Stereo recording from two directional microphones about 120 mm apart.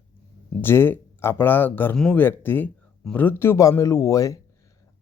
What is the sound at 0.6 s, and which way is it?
Speech, 20° left (ahead or behind).